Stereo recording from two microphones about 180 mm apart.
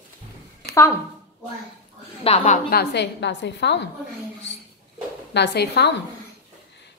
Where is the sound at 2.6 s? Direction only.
65° left (ahead or behind).